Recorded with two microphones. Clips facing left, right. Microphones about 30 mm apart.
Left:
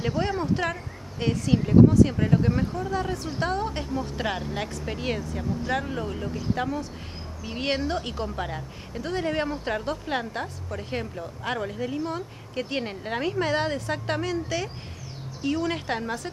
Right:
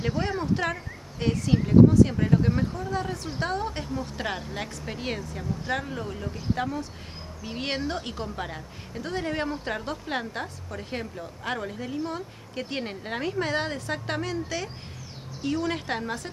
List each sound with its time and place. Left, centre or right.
0.0 s a woman's voice: centre
5.9 s a woman's voice: centre